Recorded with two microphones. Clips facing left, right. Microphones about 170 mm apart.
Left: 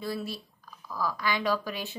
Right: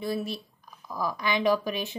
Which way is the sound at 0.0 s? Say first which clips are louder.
Right 3 dB; 20° right (ahead or behind).